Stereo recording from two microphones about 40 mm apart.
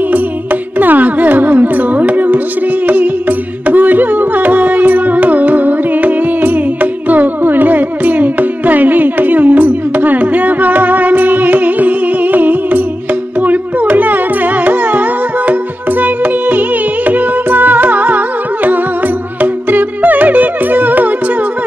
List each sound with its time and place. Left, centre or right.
0.1 s music: right